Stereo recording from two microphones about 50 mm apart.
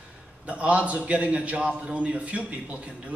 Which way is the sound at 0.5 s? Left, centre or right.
Right.